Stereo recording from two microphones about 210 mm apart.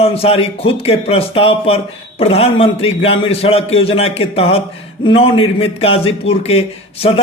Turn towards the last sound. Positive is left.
turn(degrees=25)  # may be behind; listen again after turning